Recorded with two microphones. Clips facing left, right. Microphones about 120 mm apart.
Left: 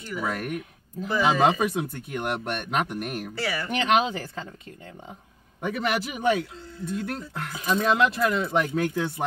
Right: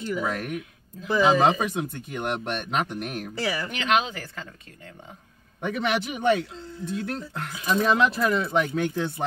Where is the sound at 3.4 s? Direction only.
25° right (ahead or behind).